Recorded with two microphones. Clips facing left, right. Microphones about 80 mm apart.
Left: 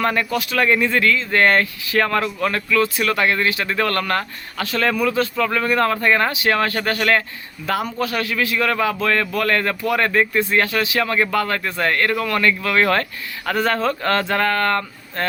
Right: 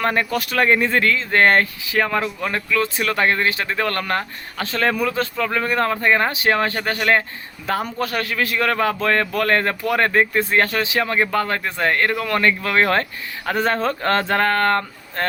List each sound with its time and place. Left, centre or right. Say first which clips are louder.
0.0 s a man's voice: even; right
1.9 s speech: left 4 dB; centre
7.9 s a man's voice: left 1 dB; right